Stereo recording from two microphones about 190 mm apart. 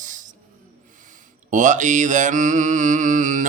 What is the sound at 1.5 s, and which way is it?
Mantra, 40° right (ahead or behind).